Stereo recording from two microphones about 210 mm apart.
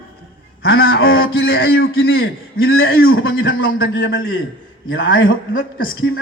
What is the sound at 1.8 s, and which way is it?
A man's voice, 70° left (ahead or behind).